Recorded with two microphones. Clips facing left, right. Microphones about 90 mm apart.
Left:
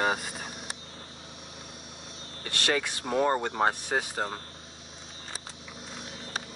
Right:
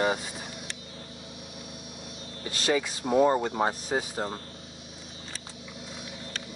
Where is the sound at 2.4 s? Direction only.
65° left (ahead or behind).